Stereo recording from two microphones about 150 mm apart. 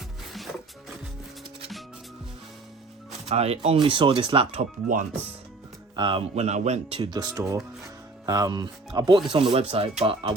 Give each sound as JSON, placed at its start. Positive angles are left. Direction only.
{"t": 3.2, "sound": "speech", "side_deg": -45}
{"t": 6.0, "sound": "speech", "side_deg": -35}
{"t": 7.0, "sound": "speech", "side_deg": -25}